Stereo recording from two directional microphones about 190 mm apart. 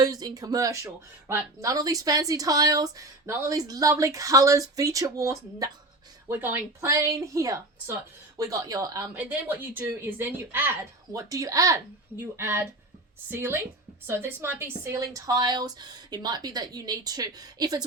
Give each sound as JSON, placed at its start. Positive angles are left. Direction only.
{"t": 0.0, "sound": "speech", "side_deg": -20}